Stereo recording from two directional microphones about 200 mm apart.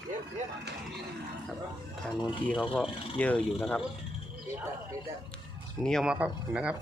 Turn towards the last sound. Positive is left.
turn(degrees=-5)  # may be behind; listen again after turning